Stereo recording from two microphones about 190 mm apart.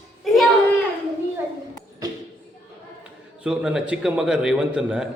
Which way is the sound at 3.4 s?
5° right (ahead or behind).